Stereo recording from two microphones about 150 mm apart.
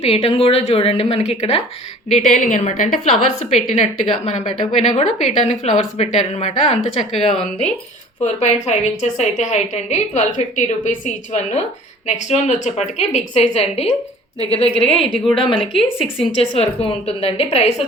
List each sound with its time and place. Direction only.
0.0 s a woman's voice: 40° left (ahead or behind)
2.0 s a woman's voice: 55° left (ahead or behind)
15.5 s speech: centre (ahead or behind)
16.1 s a woman's voice: 40° left (ahead or behind)